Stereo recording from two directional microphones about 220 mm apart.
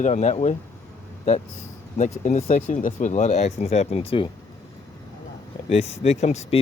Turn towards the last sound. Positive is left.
turn(degrees=30)  # may be behind; listen again after turning